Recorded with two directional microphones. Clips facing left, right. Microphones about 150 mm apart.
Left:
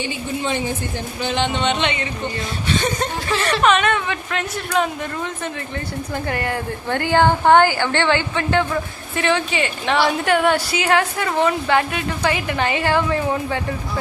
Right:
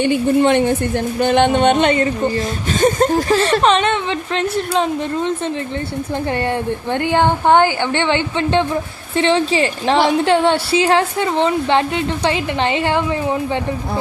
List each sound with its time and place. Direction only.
0.0 s speech: 55° right (ahead or behind); by 5.3 s 30° right (ahead or behind)
6.3 s a woman's voice: 25° right (ahead or behind)